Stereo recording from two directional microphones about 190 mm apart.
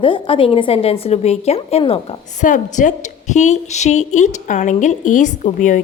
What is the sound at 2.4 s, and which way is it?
A woman's voice, 40° left (ahead or behind).